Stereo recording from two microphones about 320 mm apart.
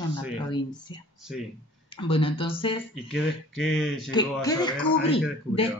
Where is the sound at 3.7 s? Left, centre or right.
Centre.